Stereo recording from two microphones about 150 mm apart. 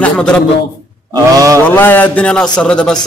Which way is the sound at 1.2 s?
20° right (ahead or behind).